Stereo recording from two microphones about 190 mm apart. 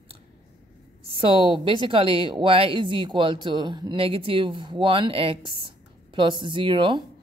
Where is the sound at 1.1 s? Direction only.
25° right (ahead or behind).